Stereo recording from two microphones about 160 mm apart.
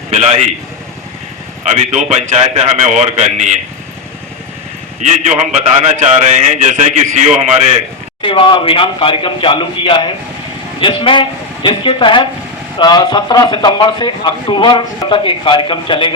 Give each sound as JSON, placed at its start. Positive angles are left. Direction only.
{"t": 0.1, "sound": "a man's voice", "side_deg": -40}
{"t": 1.7, "sound": "a man's voice", "side_deg": -45}
{"t": 4.9, "sound": "a man's voice", "side_deg": -50}
{"t": 8.2, "sound": "a man's voice", "side_deg": 30}